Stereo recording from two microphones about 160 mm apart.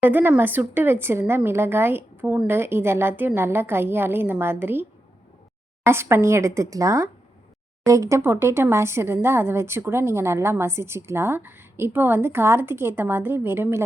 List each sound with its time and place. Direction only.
0.0 s speech: 10° right (ahead or behind)